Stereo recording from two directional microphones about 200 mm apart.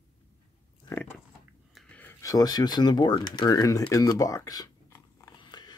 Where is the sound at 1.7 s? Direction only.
5° left (ahead or behind).